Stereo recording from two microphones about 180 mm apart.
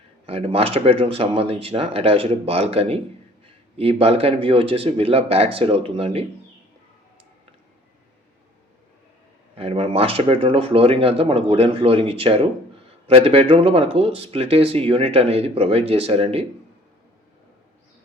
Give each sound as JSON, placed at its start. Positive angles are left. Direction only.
{"t": 0.3, "sound": "speech", "side_deg": -35}
{"t": 9.6, "sound": "speech", "side_deg": -30}